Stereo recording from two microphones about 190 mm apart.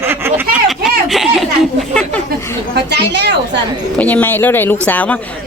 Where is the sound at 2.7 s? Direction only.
65° right (ahead or behind).